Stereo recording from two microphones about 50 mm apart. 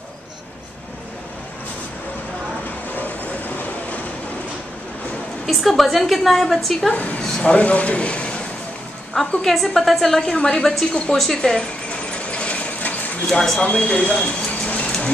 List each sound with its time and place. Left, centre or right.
3.0 s train: left
5.5 s a woman's voice: centre
6.9 s speech: left
9.1 s a woman's voice: centre
11.1 s speech: centre
12.2 s a sound: left
13.3 s speech: centre
13.6 s a sound: left